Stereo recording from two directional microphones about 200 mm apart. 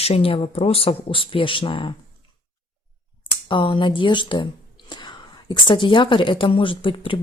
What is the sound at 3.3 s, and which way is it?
Speech, 25° left (ahead or behind).